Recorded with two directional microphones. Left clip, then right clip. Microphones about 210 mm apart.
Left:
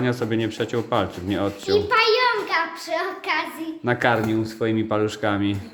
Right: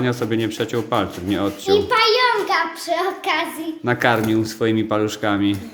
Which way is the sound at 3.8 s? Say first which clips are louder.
Right 2 dB; centre (ahead or behind).